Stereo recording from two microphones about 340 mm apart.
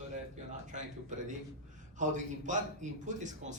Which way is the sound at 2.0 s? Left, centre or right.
Right.